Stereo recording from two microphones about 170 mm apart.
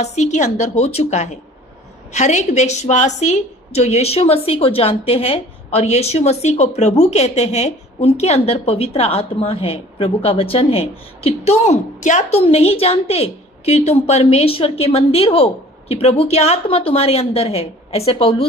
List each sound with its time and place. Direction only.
0.0 s a woman's voice: 40° left (ahead or behind)